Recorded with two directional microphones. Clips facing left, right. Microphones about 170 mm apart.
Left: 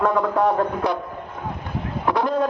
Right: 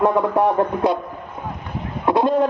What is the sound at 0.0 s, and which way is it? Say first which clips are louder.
Speech: right 3 dB; 20° right (ahead or behind).